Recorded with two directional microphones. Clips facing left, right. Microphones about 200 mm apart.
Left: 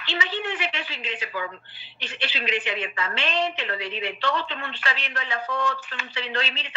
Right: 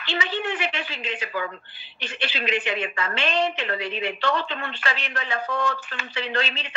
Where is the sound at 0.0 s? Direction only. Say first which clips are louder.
Right 2 dB; 50° right (ahead or behind).